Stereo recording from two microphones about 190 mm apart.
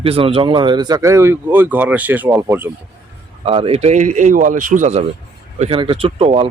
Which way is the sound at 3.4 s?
30° right (ahead or behind).